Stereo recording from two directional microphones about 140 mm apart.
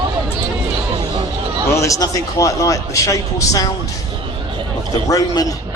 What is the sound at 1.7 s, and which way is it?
A man's voice, 20° left (ahead or behind).